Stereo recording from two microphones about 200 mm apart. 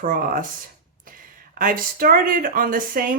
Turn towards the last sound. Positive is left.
turn(degrees=-45)  # may be behind; listen again after turning